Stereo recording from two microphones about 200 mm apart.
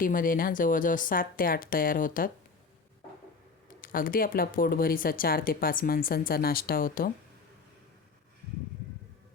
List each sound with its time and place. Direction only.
0.0 s speech: 45° left (ahead or behind)
3.8 s speech: 45° left (ahead or behind)